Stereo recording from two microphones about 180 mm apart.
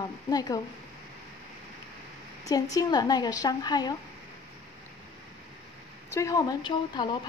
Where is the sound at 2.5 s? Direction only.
20° left (ahead or behind).